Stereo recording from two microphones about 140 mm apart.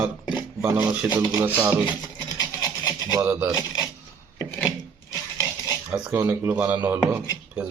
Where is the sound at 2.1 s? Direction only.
25° left (ahead or behind).